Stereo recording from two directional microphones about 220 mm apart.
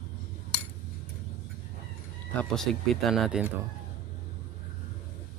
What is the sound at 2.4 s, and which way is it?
Speech, centre (ahead or behind).